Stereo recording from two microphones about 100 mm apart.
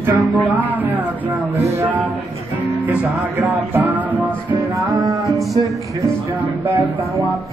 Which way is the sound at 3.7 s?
15° right (ahead or behind).